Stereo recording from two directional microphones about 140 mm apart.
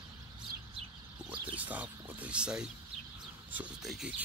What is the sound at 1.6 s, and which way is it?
Speech, 10° right (ahead or behind).